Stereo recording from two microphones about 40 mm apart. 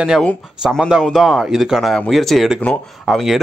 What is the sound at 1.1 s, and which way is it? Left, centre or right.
Speech, centre.